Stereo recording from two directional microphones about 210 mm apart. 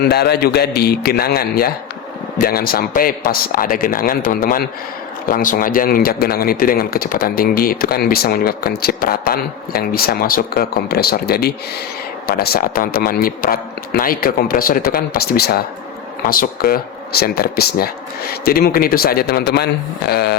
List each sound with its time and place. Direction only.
0.0 s speech: 50° left (ahead or behind)